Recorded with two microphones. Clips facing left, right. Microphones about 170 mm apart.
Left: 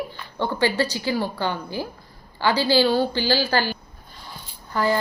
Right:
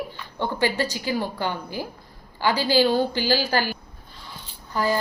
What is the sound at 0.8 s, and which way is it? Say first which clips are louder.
Speech: left 2 dB; 15° right (ahead or behind).